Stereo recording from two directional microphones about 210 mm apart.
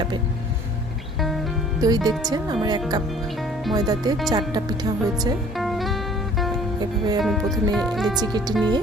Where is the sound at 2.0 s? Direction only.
20° right (ahead or behind).